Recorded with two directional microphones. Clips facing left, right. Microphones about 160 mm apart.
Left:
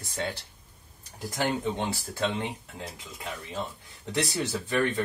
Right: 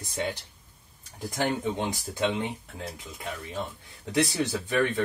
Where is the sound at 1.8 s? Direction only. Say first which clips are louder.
Right 1 dB; 15° right (ahead or behind).